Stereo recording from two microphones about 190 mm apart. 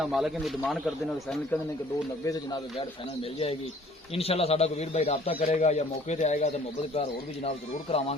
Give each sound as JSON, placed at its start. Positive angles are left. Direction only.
{"t": 0.0, "sound": "a man's voice", "side_deg": 0}
{"t": 2.2, "sound": "speech", "side_deg": 20}
{"t": 2.7, "sound": "speech", "side_deg": 30}